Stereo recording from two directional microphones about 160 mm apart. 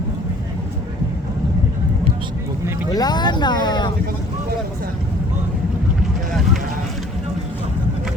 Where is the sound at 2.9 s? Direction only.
25° left (ahead or behind).